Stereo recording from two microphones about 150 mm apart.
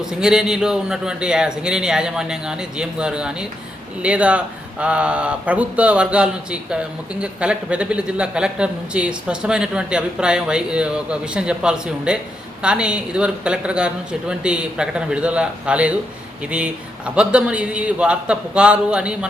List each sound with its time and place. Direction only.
0.0 s a man's voice: 5° right (ahead or behind)